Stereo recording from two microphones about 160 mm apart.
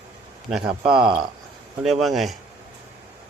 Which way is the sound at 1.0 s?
30° right (ahead or behind).